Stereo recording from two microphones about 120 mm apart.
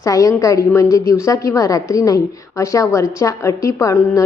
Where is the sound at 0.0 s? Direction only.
25° left (ahead or behind).